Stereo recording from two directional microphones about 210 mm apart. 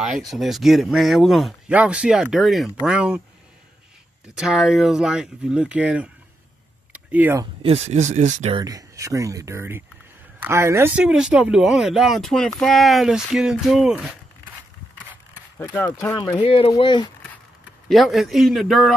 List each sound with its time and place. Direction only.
0.0 s speech: centre (ahead or behind)
4.4 s speech: centre (ahead or behind)
7.1 s speech: 10° right (ahead or behind)
7.6 s speech: 30° right (ahead or behind)
8.6 s speech: 15° right (ahead or behind)
15.6 s speech: 10° left (ahead or behind)
16.4 s speech: 25° left (ahead or behind)
17.8 s speech: centre (ahead or behind)